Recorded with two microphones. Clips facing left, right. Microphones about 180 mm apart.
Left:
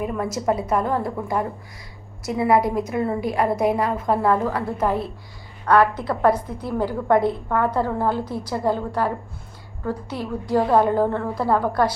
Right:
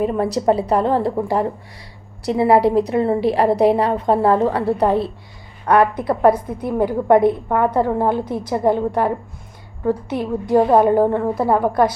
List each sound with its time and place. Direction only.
0.0 s a woman's voice: 30° right (ahead or behind)